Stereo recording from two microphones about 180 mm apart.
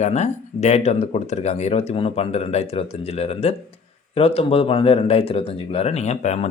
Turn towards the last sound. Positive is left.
turn(degrees=35)  # may be behind; listen again after turning